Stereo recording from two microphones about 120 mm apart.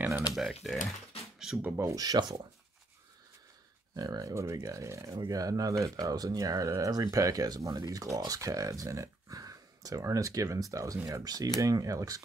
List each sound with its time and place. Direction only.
0.3 s speech: centre (ahead or behind)
1.6 s speech: 20° right (ahead or behind); by 2.4 s 40° right (ahead or behind)
3.9 s speech: 30° right (ahead or behind)